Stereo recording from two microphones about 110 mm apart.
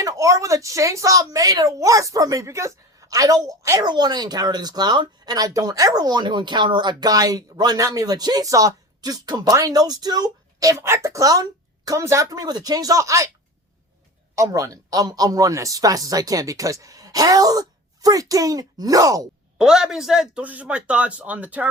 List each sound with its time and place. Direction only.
0.0 s a woman's voice: 30° right (ahead or behind)
3.8 s speech: 40° right (ahead or behind)
14.3 s speech: 30° right (ahead or behind)
19.5 s a man's voice: 5° right (ahead or behind)